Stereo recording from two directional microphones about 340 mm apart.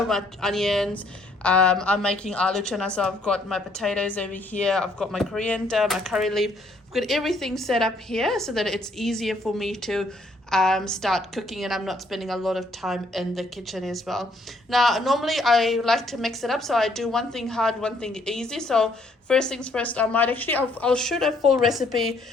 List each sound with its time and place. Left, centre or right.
0.1 s a woman's voice: centre